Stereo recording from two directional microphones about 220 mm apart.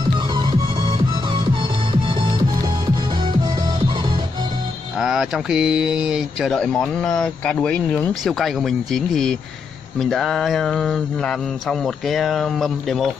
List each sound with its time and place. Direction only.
0.3 s music: 20° right (ahead or behind)
4.9 s mantra: centre (ahead or behind)